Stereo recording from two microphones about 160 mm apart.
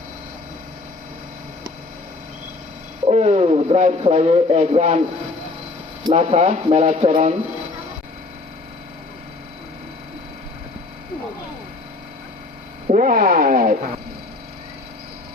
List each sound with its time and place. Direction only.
3.1 s speech: 45° right (ahead or behind)
6.1 s speech: 45° right (ahead or behind)
12.9 s a sound: 55° right (ahead or behind)